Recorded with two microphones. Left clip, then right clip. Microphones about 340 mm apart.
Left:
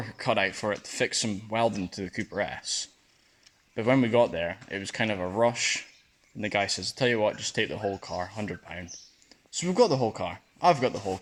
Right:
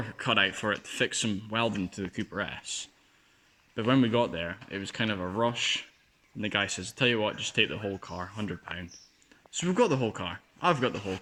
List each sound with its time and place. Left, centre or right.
0.3 s speech: centre
3.8 s speech: centre